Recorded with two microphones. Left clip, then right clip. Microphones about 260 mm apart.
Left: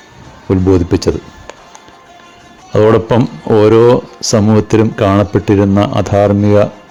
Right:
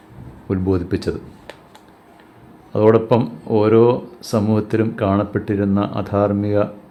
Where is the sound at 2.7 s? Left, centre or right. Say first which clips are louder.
Left 5 dB; left.